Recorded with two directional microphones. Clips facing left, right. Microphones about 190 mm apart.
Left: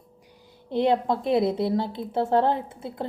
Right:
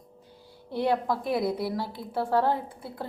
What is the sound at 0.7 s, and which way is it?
A woman's voice, 20° left (ahead or behind).